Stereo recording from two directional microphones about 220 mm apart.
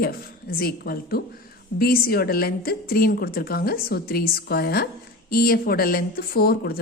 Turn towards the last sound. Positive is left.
turn(degrees=45)  # may be behind; listen again after turning